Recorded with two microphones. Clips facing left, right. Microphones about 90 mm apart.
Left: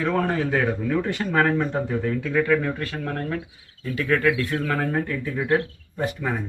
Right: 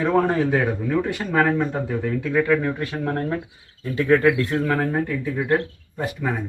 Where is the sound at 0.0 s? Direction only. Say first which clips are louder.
Right 4 dB; 20° right (ahead or behind).